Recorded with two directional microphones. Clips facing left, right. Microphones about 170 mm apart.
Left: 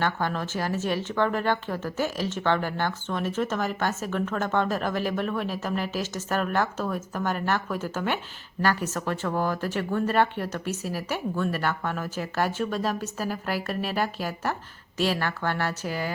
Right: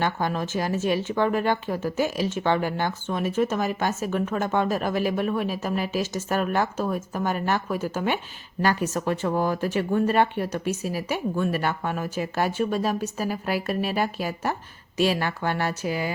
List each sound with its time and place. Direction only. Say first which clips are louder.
0.0 s speech: right 2 dB; 15° right (ahead or behind)